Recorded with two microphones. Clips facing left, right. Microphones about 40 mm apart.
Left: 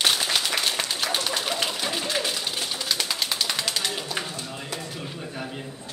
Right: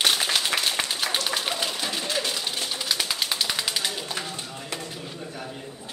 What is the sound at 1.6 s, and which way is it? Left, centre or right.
Pigeon, centre.